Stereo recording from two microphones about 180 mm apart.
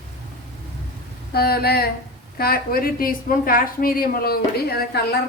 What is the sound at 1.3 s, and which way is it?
A woman's voice, 60° left (ahead or behind).